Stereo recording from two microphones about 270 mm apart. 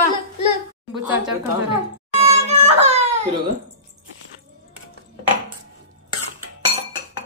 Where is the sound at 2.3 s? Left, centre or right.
Right.